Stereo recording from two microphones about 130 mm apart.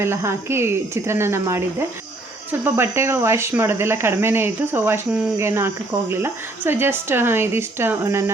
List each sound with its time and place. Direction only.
0.0 s a woman's voice: 20° right (ahead or behind)